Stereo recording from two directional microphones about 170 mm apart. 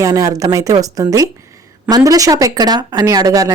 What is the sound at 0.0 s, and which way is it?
A woman's voice, 20° right (ahead or behind).